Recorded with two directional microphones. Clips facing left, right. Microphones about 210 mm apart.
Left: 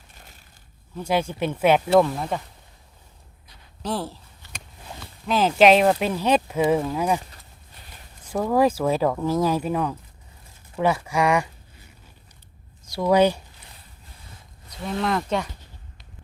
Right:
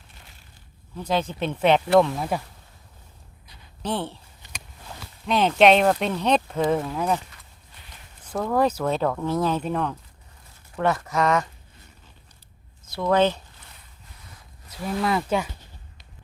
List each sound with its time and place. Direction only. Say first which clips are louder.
0.9 s speech: left 1 dB; 10° left (ahead or behind)
3.8 s speech: even; centre (ahead or behind)
4.4 s a sound: even; 15° right (ahead or behind)
5.2 s speech: left 1 dB; centre (ahead or behind)
8.2 s speech: left 2 dB; 10° left (ahead or behind)
12.9 s speech: left 2 dB; 10° left (ahead or behind)
14.7 s speech: even; 5° right (ahead or behind)